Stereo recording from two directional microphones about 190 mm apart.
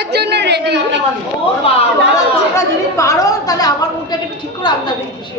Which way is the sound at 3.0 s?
15° left (ahead or behind).